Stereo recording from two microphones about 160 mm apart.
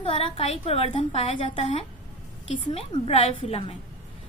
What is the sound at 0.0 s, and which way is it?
A woman's voice, 40° left (ahead or behind).